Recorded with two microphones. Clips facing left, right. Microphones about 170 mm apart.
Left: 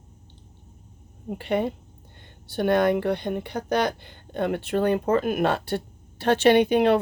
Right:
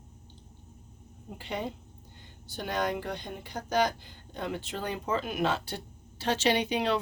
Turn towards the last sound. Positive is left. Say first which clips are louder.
# left 10 dB
turn(degrees=55)  # may be behind; listen again after turning